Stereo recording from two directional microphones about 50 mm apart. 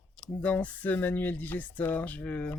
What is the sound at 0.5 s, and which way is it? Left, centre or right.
Speech, left.